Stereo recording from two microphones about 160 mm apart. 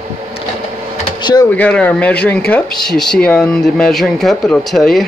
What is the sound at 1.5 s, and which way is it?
Speech, 10° left (ahead or behind).